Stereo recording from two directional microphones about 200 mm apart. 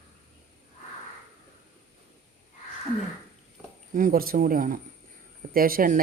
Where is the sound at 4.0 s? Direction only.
45° right (ahead or behind).